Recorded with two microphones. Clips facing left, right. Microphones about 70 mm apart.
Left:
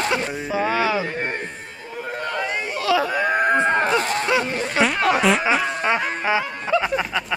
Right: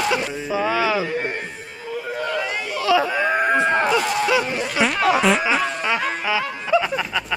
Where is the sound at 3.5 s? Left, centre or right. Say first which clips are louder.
Even; left.